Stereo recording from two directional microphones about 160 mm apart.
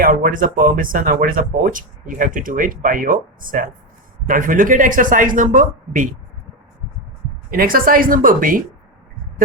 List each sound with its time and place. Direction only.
0.0 s speech: 55° right (ahead or behind)
7.5 s speech: 65° right (ahead or behind)